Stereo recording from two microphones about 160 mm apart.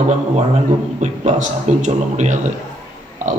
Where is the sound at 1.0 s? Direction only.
45° right (ahead or behind).